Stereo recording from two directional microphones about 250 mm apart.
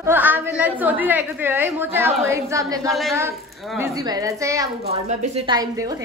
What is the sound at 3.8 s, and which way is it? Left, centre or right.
Speech, centre.